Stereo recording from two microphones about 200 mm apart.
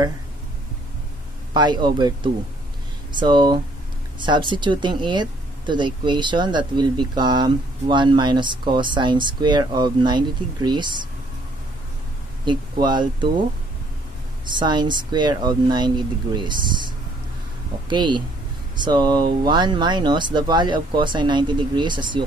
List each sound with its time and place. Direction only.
1.5 s speech: 20° right (ahead or behind)
12.4 s speech: 20° right (ahead or behind)
14.5 s speech: 20° right (ahead or behind)